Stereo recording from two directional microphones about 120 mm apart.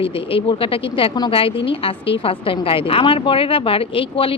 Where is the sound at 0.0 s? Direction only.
50° left (ahead or behind).